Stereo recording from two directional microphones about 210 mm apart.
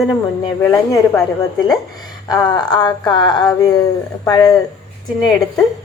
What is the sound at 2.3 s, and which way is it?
Speech, 20° left (ahead or behind).